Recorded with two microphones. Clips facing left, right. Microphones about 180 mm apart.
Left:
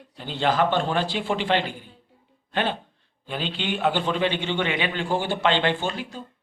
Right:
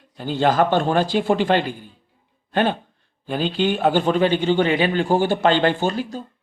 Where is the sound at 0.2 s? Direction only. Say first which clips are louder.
Right 4 dB; 45° right (ahead or behind).